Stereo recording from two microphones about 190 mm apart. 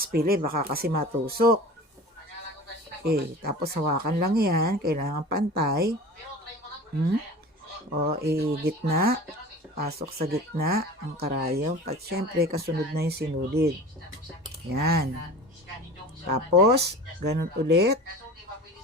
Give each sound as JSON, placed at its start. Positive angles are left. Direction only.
{"t": 0.0, "sound": "speech", "side_deg": -50}
{"t": 3.1, "sound": "speech", "side_deg": -55}
{"t": 8.0, "sound": "speech", "side_deg": -55}
{"t": 16.2, "sound": "speech", "side_deg": -55}